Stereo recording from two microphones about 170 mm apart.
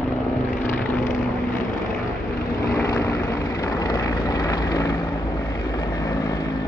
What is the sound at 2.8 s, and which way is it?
Vehicle, 20° left (ahead or behind).